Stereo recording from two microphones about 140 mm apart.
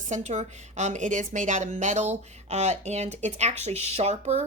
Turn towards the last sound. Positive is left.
turn(degrees=-50)  # may be behind; listen again after turning